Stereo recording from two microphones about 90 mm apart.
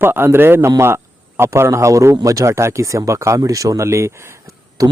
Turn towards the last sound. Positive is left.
turn(degrees=-40)  # may be behind; listen again after turning